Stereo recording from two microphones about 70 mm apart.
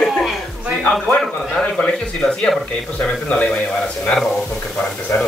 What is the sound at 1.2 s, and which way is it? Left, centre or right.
Speech, centre.